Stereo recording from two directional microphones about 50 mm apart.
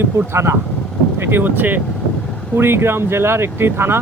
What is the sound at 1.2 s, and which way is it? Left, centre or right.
Speech, right.